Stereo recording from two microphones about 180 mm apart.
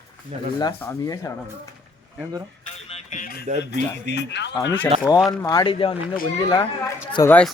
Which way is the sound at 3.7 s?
75° left (ahead or behind).